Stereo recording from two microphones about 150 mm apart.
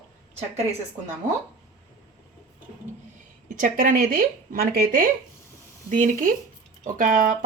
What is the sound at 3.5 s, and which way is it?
Speech, 60° right (ahead or behind).